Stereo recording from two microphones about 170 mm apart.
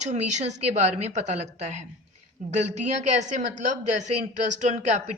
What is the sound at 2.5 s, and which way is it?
Speech, 45° right (ahead or behind).